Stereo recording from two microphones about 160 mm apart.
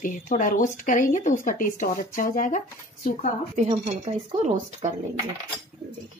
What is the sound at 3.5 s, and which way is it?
Speech, 45° right (ahead or behind).